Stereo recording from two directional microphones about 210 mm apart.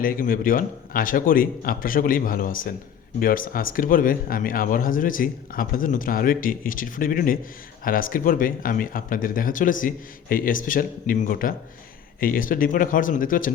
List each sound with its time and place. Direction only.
0.0 s speech: 40° left (ahead or behind)